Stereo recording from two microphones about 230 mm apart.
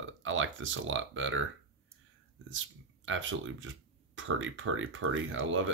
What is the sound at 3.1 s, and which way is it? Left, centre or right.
Speech, right.